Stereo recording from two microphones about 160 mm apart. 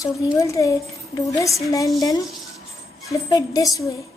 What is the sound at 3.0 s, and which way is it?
Speech, 20° left (ahead or behind).